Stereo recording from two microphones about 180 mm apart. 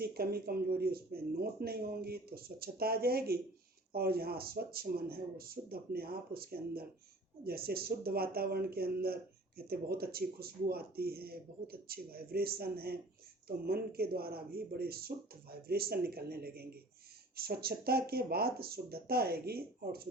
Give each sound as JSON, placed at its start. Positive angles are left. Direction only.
{"t": 0.0, "sound": "speech", "side_deg": -60}